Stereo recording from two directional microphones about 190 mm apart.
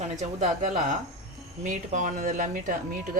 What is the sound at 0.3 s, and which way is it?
Speech, 35° right (ahead or behind).